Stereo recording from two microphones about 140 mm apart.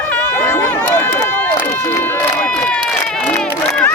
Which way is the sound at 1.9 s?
10° left (ahead or behind).